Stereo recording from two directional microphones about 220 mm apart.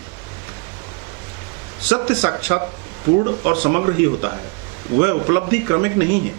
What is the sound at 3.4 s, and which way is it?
Speech, 15° right (ahead or behind).